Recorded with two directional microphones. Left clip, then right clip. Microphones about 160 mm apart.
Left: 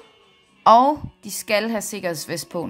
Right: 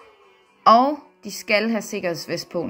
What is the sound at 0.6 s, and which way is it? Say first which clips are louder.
A woman's voice: left 1 dB; 25° left (ahead or behind).